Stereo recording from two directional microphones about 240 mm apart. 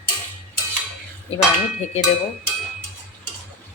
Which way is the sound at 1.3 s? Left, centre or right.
Left.